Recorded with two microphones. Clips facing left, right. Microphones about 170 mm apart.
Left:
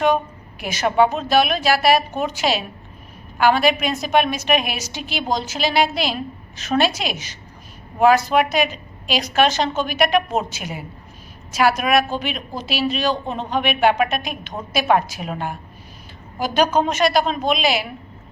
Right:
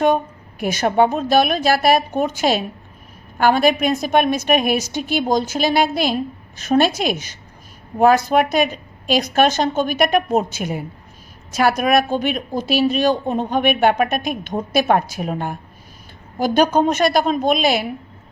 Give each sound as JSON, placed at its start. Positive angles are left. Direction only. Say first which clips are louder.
{"t": 0.6, "sound": "a woman's voice", "louder": "right 1 dB", "side_deg": -50}